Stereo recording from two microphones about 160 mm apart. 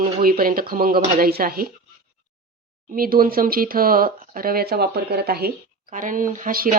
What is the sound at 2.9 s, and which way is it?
Speech, 65° right (ahead or behind).